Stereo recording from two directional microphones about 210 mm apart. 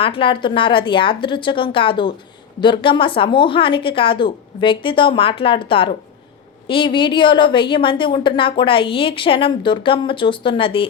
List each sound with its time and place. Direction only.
0.0 s a woman's voice: 25° left (ahead or behind)